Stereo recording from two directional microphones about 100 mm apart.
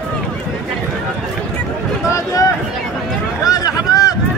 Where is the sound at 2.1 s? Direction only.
35° left (ahead or behind).